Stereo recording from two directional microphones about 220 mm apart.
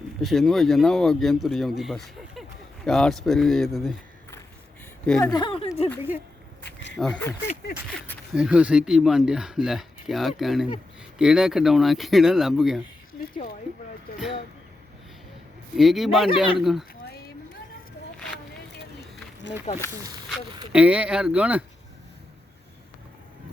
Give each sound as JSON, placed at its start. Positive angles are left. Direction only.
{"t": 0.2, "sound": "speech", "side_deg": 0}
{"t": 5.0, "sound": "speech", "side_deg": 5}
{"t": 5.3, "sound": "speech", "side_deg": 20}
{"t": 6.0, "sound": "speech", "side_deg": -10}
{"t": 6.7, "sound": "a sound", "side_deg": 50}
{"t": 7.0, "sound": "speech", "side_deg": 5}
{"t": 8.4, "sound": "speech", "side_deg": -5}
{"t": 15.7, "sound": "speech", "side_deg": 0}
{"t": 20.7, "sound": "speech", "side_deg": -5}